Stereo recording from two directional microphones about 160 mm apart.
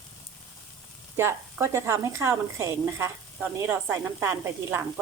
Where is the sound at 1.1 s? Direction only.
15° right (ahead or behind).